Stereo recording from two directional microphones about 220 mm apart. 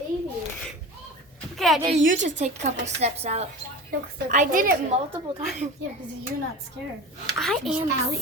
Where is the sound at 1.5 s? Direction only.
Centre (ahead or behind).